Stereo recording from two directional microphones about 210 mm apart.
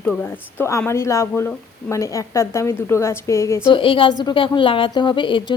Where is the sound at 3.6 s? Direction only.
25° left (ahead or behind).